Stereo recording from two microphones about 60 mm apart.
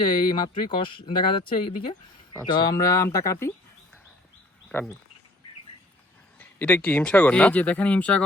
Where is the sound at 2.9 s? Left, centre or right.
Left.